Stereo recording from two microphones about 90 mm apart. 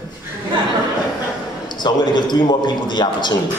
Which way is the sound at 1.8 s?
55° left (ahead or behind).